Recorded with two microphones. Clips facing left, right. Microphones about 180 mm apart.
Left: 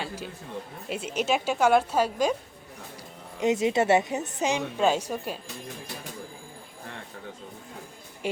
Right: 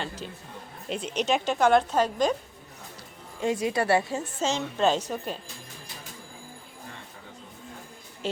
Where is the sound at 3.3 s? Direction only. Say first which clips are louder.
Left 3 dB; 20° left (ahead or behind).